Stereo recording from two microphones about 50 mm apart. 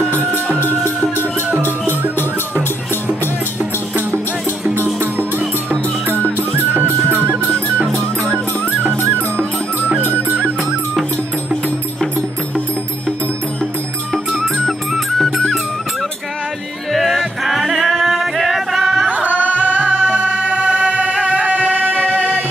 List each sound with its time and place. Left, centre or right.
0.1 s music: right
1.6 s music: left
6.5 s music: right
8.3 s music: right
14.1 s music: centre
16.9 s music: centre
19.0 s music: right